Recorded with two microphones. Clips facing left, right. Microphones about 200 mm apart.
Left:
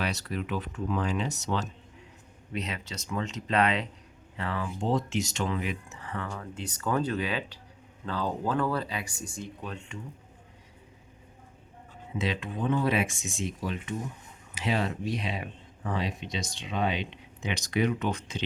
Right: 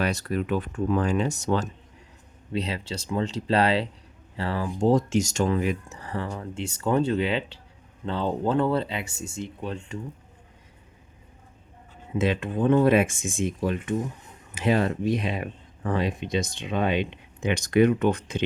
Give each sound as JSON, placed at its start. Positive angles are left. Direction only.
{"t": 0.0, "sound": "speech", "side_deg": -50}
{"t": 2.5, "sound": "speech", "side_deg": -30}
{"t": 12.1, "sound": "speech", "side_deg": -50}